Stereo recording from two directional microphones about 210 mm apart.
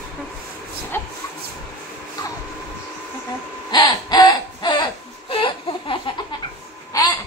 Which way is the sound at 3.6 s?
20° left (ahead or behind).